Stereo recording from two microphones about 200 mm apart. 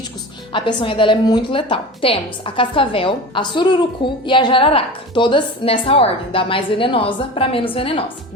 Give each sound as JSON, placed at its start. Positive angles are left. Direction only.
{"t": 0.5, "sound": "a woman's voice", "side_deg": 25}